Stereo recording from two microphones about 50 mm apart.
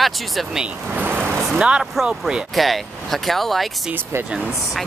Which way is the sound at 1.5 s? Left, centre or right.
Centre.